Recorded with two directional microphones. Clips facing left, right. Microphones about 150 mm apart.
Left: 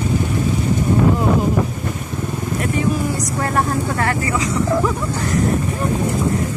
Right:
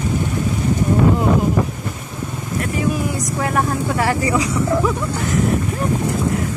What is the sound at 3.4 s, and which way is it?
Speech, 5° right (ahead or behind).